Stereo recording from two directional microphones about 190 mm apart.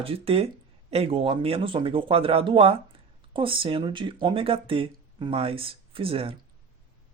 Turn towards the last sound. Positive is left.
turn(degrees=-30)  # may be behind; listen again after turning